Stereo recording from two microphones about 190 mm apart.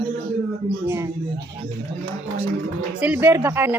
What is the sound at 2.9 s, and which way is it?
Speech, 5° right (ahead or behind).